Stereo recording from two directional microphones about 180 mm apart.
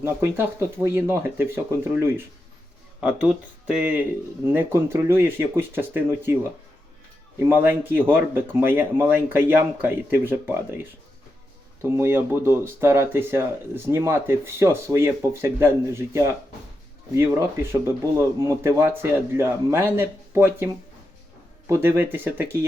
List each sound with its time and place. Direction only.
0.0 s speech: 15° right (ahead or behind)
21.7 s speech: 15° right (ahead or behind)